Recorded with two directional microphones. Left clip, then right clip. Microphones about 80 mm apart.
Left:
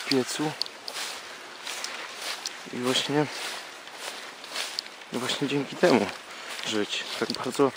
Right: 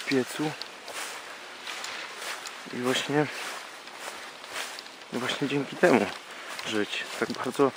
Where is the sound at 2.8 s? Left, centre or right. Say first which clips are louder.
Left 1 dB; left.